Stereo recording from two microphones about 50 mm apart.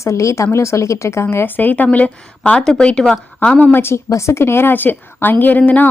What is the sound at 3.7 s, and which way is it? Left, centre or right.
A woman's voice, left.